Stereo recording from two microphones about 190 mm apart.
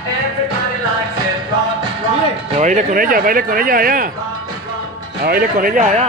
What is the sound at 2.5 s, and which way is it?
Speech, 40° right (ahead or behind).